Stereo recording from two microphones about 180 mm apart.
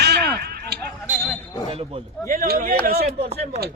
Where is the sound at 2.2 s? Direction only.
55° right (ahead or behind).